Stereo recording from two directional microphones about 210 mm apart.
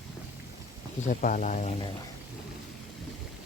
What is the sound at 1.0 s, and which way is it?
Speech, 40° left (ahead or behind).